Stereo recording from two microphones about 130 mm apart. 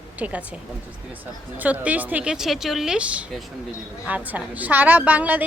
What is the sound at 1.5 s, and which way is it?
A woman's voice, 10° right (ahead or behind).